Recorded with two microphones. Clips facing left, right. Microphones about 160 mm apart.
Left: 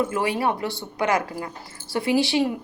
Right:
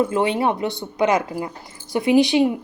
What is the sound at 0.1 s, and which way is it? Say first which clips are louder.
Speech: right 4 dB; 25° right (ahead or behind).